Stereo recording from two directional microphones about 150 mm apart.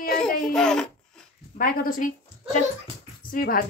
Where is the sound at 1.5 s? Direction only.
65° left (ahead or behind).